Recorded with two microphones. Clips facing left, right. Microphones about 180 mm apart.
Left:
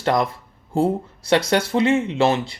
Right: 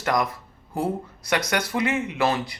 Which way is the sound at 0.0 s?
30° left (ahead or behind).